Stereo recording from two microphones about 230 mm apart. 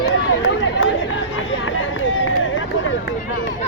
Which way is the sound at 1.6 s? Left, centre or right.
Left.